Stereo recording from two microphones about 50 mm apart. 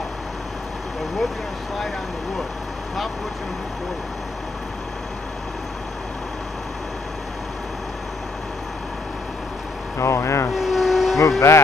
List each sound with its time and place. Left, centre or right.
9.9 s vehicle: left
10.5 s vehicle: centre
11.1 s speech: left